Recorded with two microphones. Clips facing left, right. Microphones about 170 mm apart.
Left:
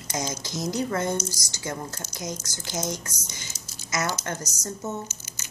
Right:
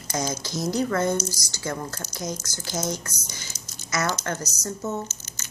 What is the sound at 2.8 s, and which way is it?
A woman's voice, 20° left (ahead or behind).